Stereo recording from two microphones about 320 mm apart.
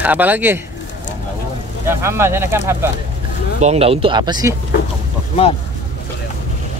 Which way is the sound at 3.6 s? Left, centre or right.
Centre.